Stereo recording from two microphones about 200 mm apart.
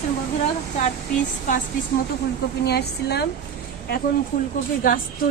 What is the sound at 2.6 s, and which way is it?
Speech, 55° left (ahead or behind).